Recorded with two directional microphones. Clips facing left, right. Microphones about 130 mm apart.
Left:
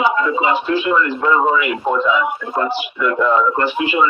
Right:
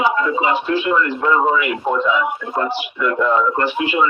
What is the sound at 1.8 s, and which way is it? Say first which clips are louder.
Speech: left 1 dB; 90° left.